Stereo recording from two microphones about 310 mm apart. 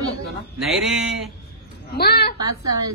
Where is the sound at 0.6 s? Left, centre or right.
Centre.